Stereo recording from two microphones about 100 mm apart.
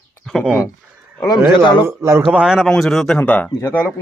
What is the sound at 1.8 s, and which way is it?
Speech, 25° right (ahead or behind).